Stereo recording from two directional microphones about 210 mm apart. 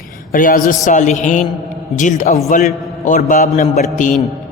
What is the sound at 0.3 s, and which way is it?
A man's voice, 40° left (ahead or behind).